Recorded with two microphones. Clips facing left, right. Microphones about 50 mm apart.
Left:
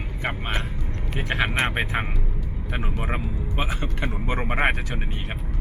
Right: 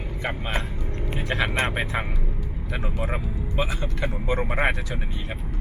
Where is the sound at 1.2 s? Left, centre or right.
Left.